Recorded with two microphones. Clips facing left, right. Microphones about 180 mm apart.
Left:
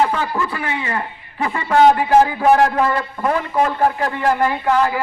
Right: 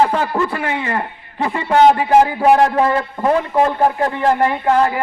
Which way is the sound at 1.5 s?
20° right (ahead or behind).